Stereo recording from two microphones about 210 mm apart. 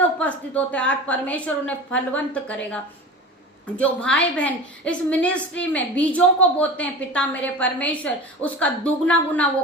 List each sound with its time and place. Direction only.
0.0 s a woman's voice: 5° left (ahead or behind)
3.8 s a woman's voice: 5° left (ahead or behind)